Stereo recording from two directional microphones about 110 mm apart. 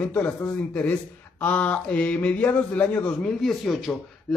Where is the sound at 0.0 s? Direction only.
10° left (ahead or behind).